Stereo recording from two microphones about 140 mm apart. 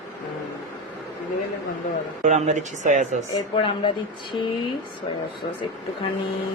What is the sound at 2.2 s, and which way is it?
Speech, 55° right (ahead or behind).